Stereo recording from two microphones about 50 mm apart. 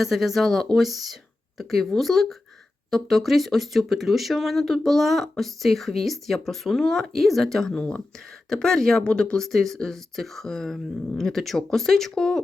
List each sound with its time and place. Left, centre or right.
0.0 s speech: centre
7.8 s speech: centre